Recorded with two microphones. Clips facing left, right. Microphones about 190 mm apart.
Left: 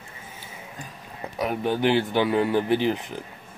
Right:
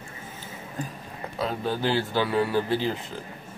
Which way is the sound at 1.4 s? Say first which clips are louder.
Left 4 dB; 20° left (ahead or behind).